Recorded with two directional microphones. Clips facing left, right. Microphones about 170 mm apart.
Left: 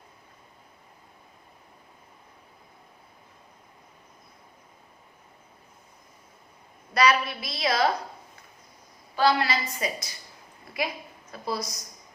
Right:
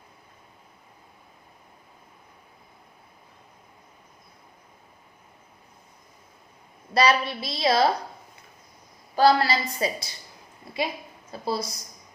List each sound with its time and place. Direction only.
6.9 s a woman's voice: 30° right (ahead or behind)
9.1 s a woman's voice: 35° right (ahead or behind)